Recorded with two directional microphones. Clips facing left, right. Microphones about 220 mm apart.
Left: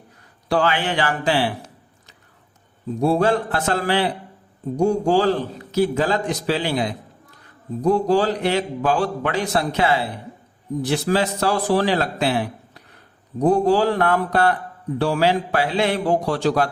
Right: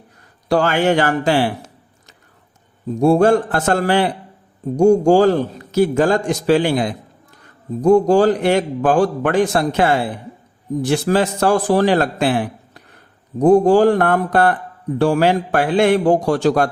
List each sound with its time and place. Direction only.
0.4 s a man's voice: 45° right (ahead or behind)
3.0 s a man's voice: 50° right (ahead or behind)